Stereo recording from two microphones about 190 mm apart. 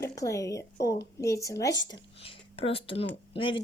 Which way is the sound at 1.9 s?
30° left (ahead or behind).